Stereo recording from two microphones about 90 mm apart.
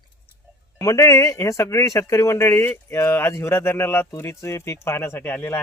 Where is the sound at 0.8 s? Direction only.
35° left (ahead or behind).